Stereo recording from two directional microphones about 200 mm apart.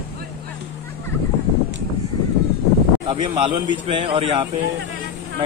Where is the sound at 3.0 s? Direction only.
25° right (ahead or behind).